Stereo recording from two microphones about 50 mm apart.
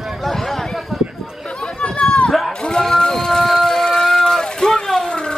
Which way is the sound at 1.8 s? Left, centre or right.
Centre.